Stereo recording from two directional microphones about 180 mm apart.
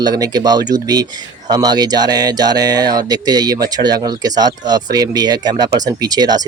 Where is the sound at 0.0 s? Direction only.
20° right (ahead or behind).